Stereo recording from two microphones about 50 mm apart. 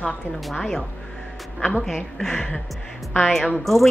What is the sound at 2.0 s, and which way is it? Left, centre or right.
Speech, centre.